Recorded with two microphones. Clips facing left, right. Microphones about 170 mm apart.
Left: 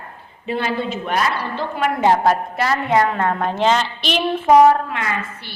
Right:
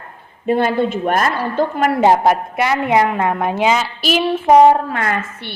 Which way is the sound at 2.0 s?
20° right (ahead or behind).